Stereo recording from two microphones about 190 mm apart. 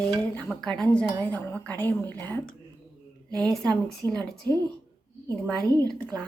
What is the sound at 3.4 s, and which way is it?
Speech, 5° left (ahead or behind).